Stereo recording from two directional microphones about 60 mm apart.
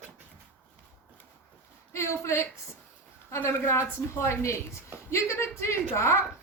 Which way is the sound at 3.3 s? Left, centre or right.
Left.